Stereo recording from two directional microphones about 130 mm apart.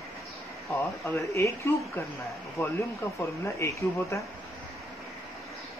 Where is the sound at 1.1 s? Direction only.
25° left (ahead or behind).